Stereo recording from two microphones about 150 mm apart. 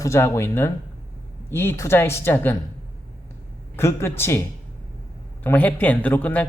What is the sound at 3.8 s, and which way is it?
Speech, 15° left (ahead or behind).